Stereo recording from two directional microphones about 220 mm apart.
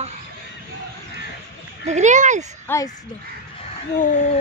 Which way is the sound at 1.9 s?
35° right (ahead or behind).